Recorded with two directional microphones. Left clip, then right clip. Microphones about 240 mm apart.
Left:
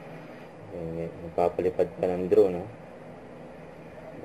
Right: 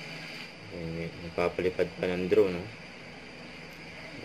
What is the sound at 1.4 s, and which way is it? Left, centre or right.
Speech, right.